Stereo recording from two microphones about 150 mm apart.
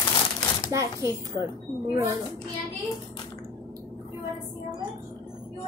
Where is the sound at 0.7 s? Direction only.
20° right (ahead or behind).